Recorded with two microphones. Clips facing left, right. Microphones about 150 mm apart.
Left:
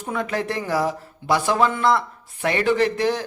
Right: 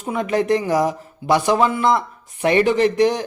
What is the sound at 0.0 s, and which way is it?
Speech, 20° right (ahead or behind).